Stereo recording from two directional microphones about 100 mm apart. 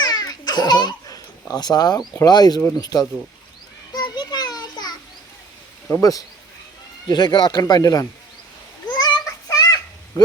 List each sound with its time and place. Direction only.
0.0 s baby laughter: 45° left (ahead or behind)
2.6 s speech: 25° left (ahead or behind)
2.8 s speech: 40° left (ahead or behind)
3.9 s children playing: 45° left (ahead or behind)
5.9 s speech: 35° left (ahead or behind)
8.9 s child singing: 45° left (ahead or behind)
10.2 s speech: 40° left (ahead or behind)